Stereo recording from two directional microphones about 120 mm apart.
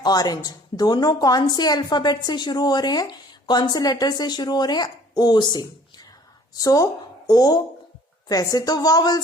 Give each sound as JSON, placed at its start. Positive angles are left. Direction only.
{"t": 0.0, "sound": "a woman's voice", "side_deg": 35}